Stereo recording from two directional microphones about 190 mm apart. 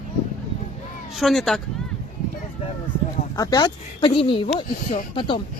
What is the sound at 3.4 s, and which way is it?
Speech, 20° left (ahead or behind).